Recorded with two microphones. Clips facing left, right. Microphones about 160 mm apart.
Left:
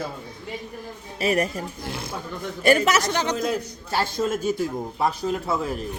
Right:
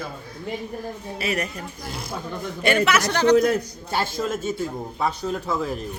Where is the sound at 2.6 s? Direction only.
40° left (ahead or behind).